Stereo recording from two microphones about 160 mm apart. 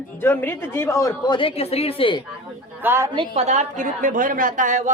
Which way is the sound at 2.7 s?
15° right (ahead or behind).